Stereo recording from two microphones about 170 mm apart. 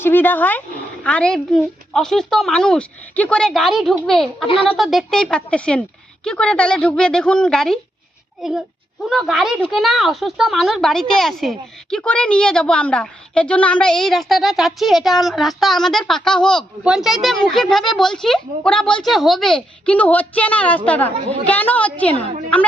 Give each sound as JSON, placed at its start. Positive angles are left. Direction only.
{"t": 0.0, "sound": "a woman's voice", "side_deg": 10}
{"t": 4.4, "sound": "a woman's voice", "side_deg": 35}
{"t": 4.8, "sound": "a woman's voice", "side_deg": 0}